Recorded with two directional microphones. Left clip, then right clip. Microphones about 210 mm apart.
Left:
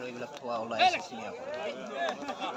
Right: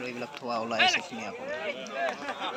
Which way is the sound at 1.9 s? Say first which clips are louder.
Right 2 dB; 45° left (ahead or behind).